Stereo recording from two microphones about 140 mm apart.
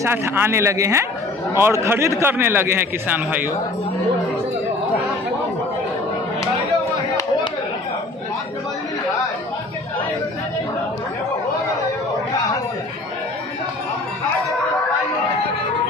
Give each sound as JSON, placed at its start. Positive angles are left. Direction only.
{"t": 0.0, "sound": "a man's voice", "side_deg": -15}